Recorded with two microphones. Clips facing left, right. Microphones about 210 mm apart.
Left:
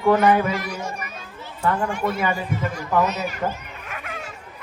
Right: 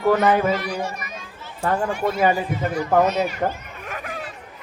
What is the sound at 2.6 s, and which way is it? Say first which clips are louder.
Speech: right 2 dB; 50° right (ahead or behind).